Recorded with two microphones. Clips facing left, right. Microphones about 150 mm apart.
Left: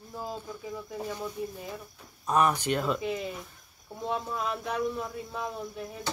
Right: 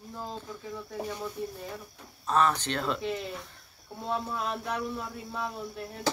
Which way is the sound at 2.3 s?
15° left (ahead or behind).